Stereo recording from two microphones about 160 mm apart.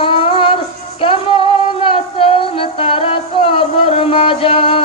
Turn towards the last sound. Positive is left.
turn(degrees=35)  # may be behind; listen again after turning